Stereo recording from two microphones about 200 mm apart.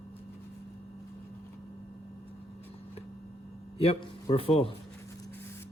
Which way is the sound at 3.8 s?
30° left (ahead or behind).